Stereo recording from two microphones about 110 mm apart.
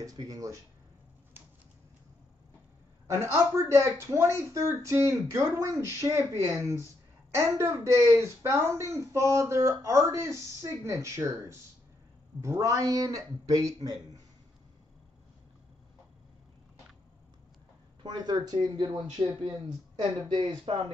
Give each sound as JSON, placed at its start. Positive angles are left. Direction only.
{"t": 0.0, "sound": "speech", "side_deg": -35}
{"t": 3.1, "sound": "speech", "side_deg": -25}
{"t": 18.0, "sound": "speech", "side_deg": -40}